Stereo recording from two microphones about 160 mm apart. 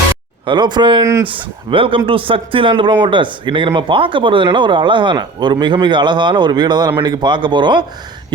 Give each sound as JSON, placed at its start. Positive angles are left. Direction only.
{"t": 0.4, "sound": "speech", "side_deg": -30}
{"t": 1.0, "sound": "speech", "side_deg": -20}
{"t": 1.3, "sound": "speech", "side_deg": -35}